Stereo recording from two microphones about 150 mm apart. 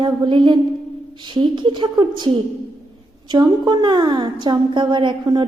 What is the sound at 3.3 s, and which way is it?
A woman's voice, 30° right (ahead or behind).